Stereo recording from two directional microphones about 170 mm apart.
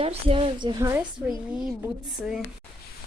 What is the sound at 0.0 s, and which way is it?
Speech, 35° right (ahead or behind).